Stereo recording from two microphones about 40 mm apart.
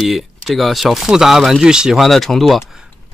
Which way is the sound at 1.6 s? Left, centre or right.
Centre.